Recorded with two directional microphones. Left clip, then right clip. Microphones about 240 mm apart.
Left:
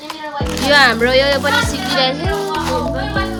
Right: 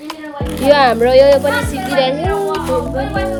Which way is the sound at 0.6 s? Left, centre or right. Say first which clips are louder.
Right 2 dB; centre.